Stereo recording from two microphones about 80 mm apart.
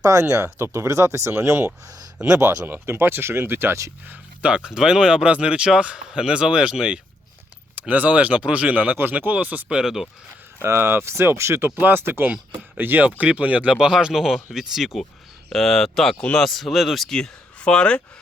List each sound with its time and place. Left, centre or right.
0.0 s speech: right
2.2 s speech: right
2.6 s speech: right
4.1 s speech: centre
10.6 s speech: right; by 18.0 s centre